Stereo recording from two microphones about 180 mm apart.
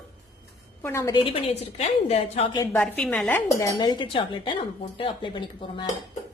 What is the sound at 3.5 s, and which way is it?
Speech, 20° left (ahead or behind).